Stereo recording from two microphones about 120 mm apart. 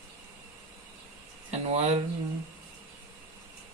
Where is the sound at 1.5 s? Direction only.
70° right (ahead or behind).